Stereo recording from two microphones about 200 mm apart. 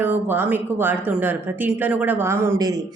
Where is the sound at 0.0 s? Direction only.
10° right (ahead or behind).